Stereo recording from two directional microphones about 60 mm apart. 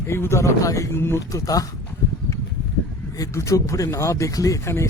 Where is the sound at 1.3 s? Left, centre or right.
Left.